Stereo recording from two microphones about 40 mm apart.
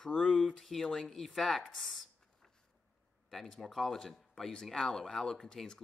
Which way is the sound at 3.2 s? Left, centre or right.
Centre.